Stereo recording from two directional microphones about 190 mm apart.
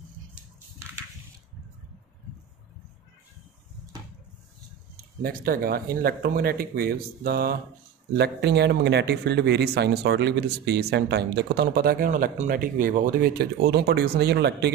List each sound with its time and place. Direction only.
4.9 s speech: 50° right (ahead or behind)